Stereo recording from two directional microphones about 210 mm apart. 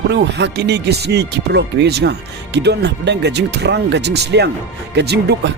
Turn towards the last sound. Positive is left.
turn(degrees=-55)  # may be behind; listen again after turning